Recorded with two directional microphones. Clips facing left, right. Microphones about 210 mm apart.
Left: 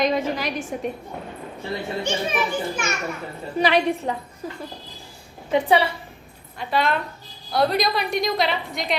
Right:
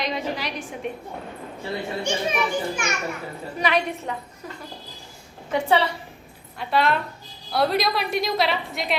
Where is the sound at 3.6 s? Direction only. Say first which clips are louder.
Left 4 dB; 35° left (ahead or behind).